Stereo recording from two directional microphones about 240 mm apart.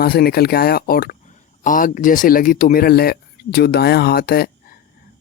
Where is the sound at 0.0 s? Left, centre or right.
Left.